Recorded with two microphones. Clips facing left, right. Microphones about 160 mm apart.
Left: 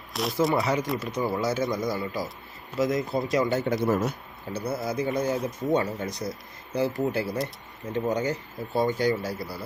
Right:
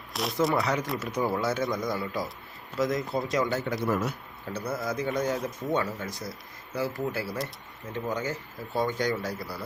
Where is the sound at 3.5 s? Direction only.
20° left (ahead or behind).